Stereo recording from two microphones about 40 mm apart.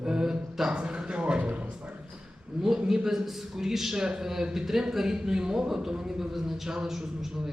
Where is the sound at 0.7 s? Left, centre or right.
Right.